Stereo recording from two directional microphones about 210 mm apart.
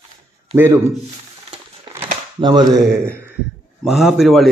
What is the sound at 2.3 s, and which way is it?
Speech, 20° right (ahead or behind).